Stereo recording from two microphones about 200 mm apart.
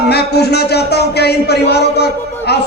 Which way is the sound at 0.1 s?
55° left (ahead or behind).